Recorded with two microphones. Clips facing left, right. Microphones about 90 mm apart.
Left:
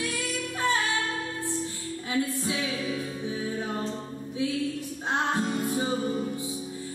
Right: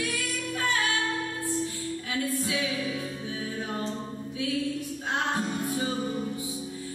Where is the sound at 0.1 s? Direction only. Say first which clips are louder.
Even; 25° left (ahead or behind).